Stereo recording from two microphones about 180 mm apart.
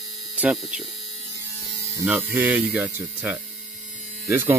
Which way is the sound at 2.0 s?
10° right (ahead or behind).